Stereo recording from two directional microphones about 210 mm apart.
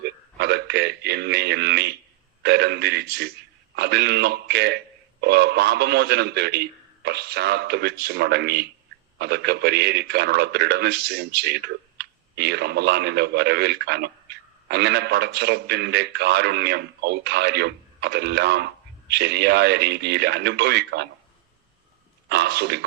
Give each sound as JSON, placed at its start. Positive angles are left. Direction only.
{"t": 0.0, "sound": "a man's voice", "side_deg": -50}
{"t": 22.3, "sound": "a man's voice", "side_deg": -50}